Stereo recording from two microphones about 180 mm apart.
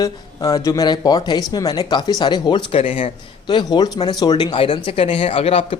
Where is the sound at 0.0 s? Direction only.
20° left (ahead or behind).